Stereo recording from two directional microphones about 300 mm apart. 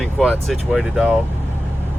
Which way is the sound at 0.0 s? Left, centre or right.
Centre.